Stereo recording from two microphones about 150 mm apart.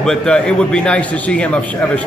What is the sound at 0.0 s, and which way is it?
A man's voice, 5° left (ahead or behind).